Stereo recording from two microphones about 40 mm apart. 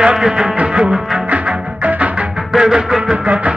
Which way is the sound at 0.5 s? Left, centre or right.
Right.